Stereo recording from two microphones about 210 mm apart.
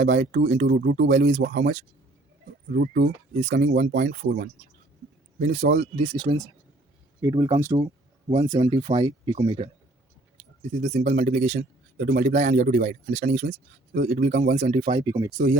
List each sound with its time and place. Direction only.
0.0 s speech: 40° right (ahead or behind)
6.0 s speech: 25° right (ahead or behind)
10.8 s speech: 30° right (ahead or behind)
13.5 s speech: 45° right (ahead or behind)
14.5 s speech: 30° right (ahead or behind)